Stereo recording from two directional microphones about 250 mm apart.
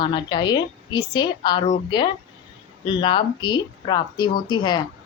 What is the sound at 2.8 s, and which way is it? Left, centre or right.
Speech, centre.